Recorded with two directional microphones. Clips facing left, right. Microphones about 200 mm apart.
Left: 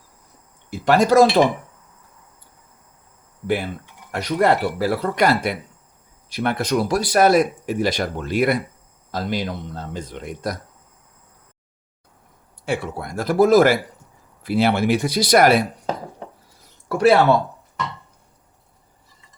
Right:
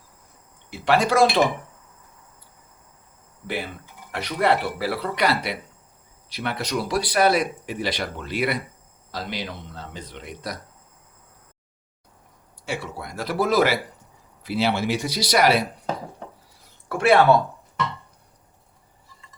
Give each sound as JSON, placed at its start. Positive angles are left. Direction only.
{"t": 0.7, "sound": "speech", "side_deg": 45}
{"t": 3.4, "sound": "speech", "side_deg": 50}
{"t": 12.6, "sound": "speech", "side_deg": 50}
{"t": 16.9, "sound": "speech", "side_deg": 35}